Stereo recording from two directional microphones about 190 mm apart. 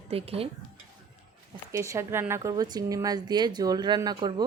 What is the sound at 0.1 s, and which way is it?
Speech, 30° right (ahead or behind).